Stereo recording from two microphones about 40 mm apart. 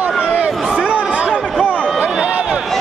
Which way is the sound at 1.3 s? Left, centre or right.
Right.